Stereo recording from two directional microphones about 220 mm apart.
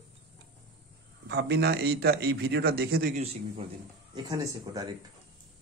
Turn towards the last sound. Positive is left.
turn(degrees=-15)  # may be behind; listen again after turning